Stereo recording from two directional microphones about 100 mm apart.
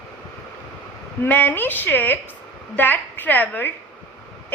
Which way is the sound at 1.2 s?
20° left (ahead or behind).